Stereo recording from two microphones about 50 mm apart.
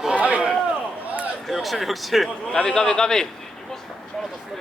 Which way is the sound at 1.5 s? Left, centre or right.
Centre.